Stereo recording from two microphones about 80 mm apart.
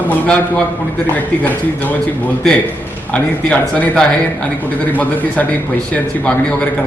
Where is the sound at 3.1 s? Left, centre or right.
Centre.